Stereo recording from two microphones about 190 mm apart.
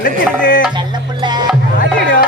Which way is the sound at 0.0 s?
50° left (ahead or behind).